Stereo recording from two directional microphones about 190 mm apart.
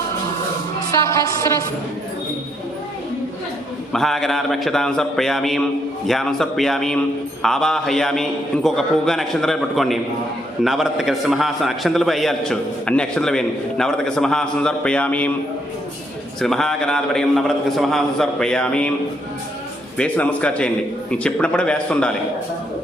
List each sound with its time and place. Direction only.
1.0 s a man's voice: 15° left (ahead or behind)
3.9 s a man's voice: centre (ahead or behind)
16.4 s a man's voice: centre (ahead or behind)
20.0 s a man's voice: 5° left (ahead or behind)